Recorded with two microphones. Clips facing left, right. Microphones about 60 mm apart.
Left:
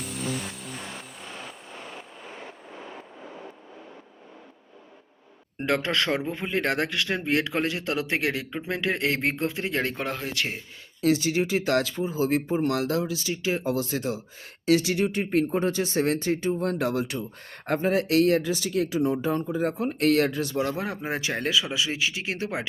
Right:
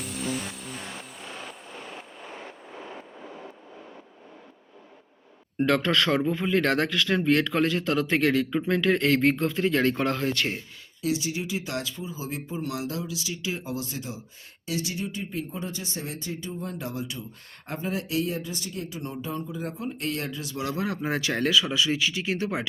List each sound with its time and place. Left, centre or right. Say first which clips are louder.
0.0 s music: even; centre
5.5 s speech: right 2 dB; centre
10.0 s speech: right 4 dB; centre
11.0 s speech: left 6 dB; left
13.7 s speech: left 7 dB; left
19.5 s speech: left 7 dB; left
20.6 s speech: right 1 dB; left